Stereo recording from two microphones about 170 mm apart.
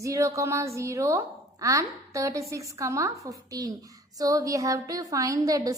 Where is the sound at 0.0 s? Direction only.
20° right (ahead or behind).